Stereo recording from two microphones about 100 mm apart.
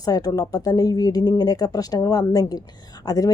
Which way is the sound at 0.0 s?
40° left (ahead or behind).